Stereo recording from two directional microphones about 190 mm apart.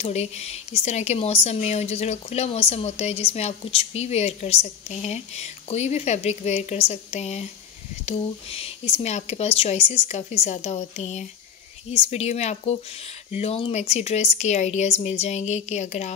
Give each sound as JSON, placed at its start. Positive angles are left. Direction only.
{"t": 0.0, "sound": "a woman's voice", "side_deg": 35}